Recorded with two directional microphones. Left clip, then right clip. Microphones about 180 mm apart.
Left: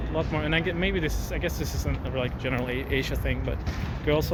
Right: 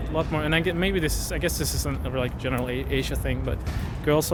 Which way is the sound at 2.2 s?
25° right (ahead or behind).